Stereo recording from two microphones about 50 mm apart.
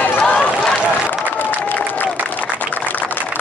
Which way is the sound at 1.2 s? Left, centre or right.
Left.